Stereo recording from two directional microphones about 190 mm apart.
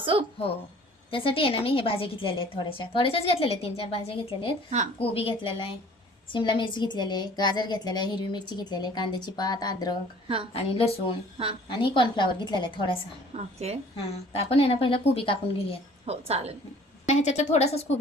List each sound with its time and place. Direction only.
0.0 s a woman's voice: 30° right (ahead or behind)
1.1 s a woman's voice: 30° left (ahead or behind)
10.5 s a woman's voice: 30° left (ahead or behind)
13.3 s a woman's voice: 35° right (ahead or behind)
13.9 s a woman's voice: 30° left (ahead or behind)
16.0 s a woman's voice: 35° right (ahead or behind)
17.1 s a woman's voice: 35° left (ahead or behind)